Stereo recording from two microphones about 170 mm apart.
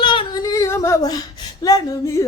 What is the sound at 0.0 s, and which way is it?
Yodeling, 30° left (ahead or behind).